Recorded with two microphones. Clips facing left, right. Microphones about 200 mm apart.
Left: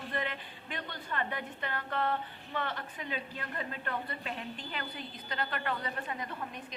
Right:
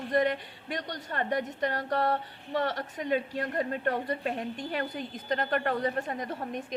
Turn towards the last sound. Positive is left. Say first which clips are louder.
# right 6 dB
turn(degrees=-40)  # may be behind; listen again after turning